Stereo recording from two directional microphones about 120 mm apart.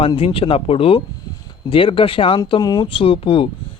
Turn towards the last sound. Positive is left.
turn(degrees=50)  # may be behind; listen again after turning